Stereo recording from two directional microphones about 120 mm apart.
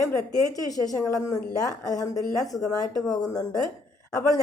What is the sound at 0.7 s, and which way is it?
A woman's voice, 30° left (ahead or behind).